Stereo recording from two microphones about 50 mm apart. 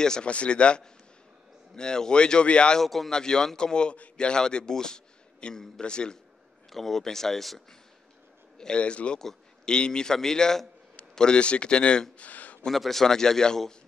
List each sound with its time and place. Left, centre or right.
0.0 s a man's voice: centre
2.8 s speech: centre
3.1 s a man's voice: centre
6.7 s speech: centre
8.5 s a man's voice: centre
12.3 s a sound: left
12.6 s a man's voice: centre